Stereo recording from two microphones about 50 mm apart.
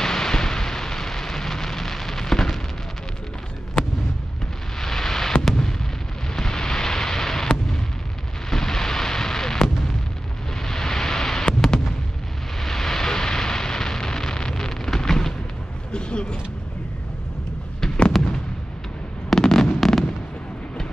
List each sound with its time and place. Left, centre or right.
0.0 s rain: centre
4.7 s fireworks: centre
6.3 s explosion: centre
8.5 s artillery fire: centre
10.6 s fireworks: centre
12.5 s a sound: centre
17.7 s fireworks: centre
19.3 s fireworks: centre